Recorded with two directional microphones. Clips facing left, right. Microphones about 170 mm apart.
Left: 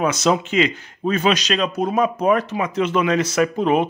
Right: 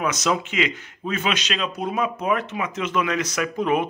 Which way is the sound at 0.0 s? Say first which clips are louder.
Left 5 dB; 30° left (ahead or behind).